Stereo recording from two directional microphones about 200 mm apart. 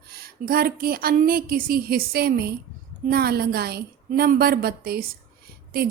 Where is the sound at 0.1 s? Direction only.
50° right (ahead or behind).